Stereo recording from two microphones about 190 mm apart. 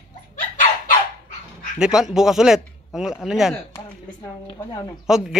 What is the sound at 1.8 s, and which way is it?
Speech, 5° right (ahead or behind).